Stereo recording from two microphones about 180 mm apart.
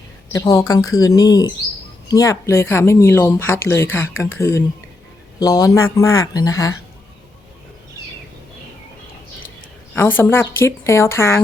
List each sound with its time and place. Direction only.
0.3 s speech: 20° left (ahead or behind)
9.9 s speech: 10° left (ahead or behind)